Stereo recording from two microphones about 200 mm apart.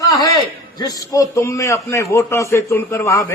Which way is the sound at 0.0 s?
20° left (ahead or behind).